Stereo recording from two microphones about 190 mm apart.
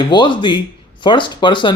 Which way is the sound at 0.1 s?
25° left (ahead or behind).